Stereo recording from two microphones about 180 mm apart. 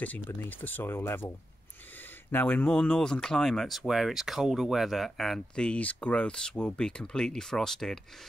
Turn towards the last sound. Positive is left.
turn(degrees=5)  # may be behind; listen again after turning